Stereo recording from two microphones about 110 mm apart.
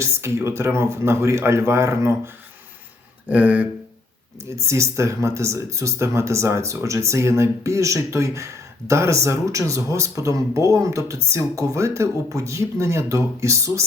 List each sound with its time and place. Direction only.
0.0 s speech: 25° right (ahead or behind)
3.2 s a sound: 15° right (ahead or behind)
4.4 s speech: 25° right (ahead or behind)